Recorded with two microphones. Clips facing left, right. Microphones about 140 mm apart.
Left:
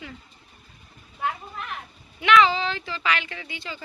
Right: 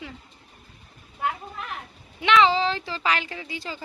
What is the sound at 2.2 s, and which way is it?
Speech, 25° right (ahead or behind).